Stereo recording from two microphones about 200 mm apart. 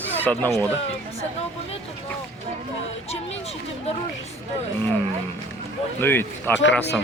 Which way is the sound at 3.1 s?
30° left (ahead or behind).